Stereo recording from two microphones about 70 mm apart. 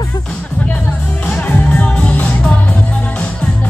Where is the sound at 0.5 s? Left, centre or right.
Centre.